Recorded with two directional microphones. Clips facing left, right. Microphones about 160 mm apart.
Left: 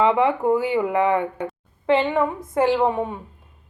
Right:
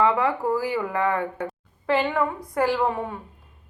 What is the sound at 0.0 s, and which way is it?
A woman's voice, 25° left (ahead or behind).